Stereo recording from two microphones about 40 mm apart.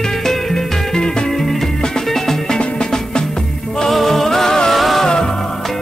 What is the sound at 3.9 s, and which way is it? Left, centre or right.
Music, centre.